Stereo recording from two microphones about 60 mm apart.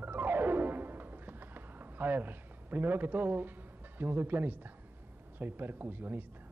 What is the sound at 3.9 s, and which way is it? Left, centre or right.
A man's voice, right.